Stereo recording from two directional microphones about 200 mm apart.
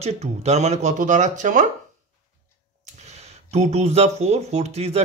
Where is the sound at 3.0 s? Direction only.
30° right (ahead or behind).